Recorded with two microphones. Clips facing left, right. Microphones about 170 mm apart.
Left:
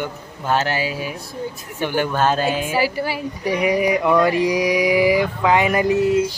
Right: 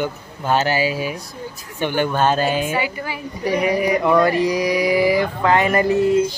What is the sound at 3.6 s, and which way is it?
Speech, 15° left (ahead or behind).